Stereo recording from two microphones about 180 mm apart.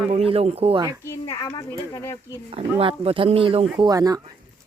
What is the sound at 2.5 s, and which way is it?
Speech, 30° right (ahead or behind).